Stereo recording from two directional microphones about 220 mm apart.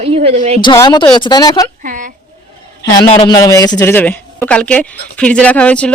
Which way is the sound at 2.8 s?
20° left (ahead or behind).